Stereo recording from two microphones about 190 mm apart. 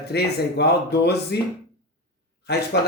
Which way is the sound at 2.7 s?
60° left (ahead or behind).